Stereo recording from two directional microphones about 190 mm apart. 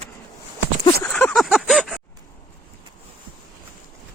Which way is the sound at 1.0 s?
5° left (ahead or behind).